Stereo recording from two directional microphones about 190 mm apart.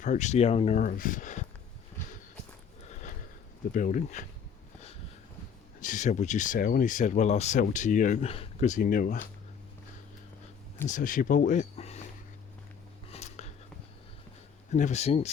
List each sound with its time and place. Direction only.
0.0 s speech: 40° left (ahead or behind)
3.7 s speech: 40° left (ahead or behind)
5.8 s speech: 40° left (ahead or behind)
10.8 s speech: 45° left (ahead or behind)
13.1 s a sound: 35° left (ahead or behind)
14.7 s speech: 40° left (ahead or behind)